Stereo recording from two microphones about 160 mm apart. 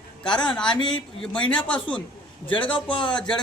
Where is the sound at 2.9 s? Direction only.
30° left (ahead or behind).